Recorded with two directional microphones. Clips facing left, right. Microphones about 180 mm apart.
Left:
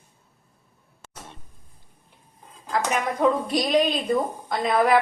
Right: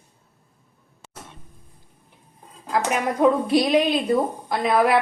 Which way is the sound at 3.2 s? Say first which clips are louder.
Right 3 dB; 15° right (ahead or behind).